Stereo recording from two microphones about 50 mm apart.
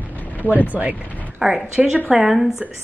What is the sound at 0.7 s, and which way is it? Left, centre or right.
Speech, right.